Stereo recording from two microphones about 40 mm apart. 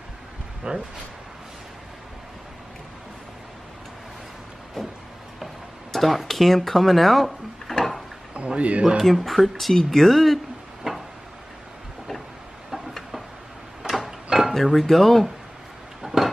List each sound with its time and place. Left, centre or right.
0.7 s speech: right
5.9 s speech: centre
8.5 s speech: right
8.9 s speech: centre
12.7 s a sound: centre
13.8 s door: centre
14.5 s speech: centre
16.0 s a sound: centre